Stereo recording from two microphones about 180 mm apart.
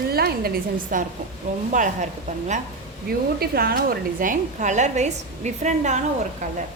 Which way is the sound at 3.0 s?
60° right (ahead or behind).